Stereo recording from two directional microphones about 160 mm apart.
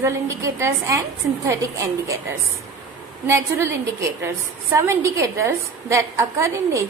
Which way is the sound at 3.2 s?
15° right (ahead or behind).